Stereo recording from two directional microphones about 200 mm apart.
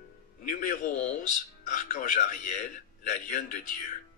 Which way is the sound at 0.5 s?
40° left (ahead or behind).